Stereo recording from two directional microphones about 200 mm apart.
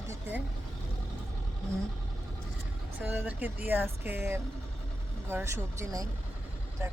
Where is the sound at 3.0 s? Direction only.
10° right (ahead or behind).